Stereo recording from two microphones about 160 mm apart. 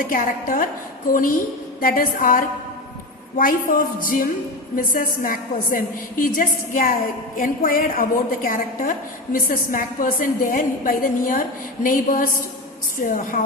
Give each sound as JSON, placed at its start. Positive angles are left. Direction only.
{"t": 0.1, "sound": "a woman's voice", "side_deg": 60}